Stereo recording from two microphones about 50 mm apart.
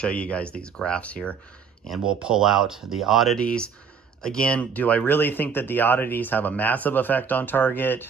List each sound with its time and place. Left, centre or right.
0.0 s speech: left
2.0 s speech: centre
3.3 s speech: centre
4.5 s speech: left
5.0 s speech: left